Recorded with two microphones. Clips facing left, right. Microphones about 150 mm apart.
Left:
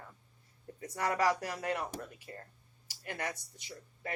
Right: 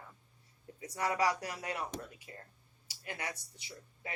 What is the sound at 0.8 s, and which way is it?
Speech, 50° left (ahead or behind).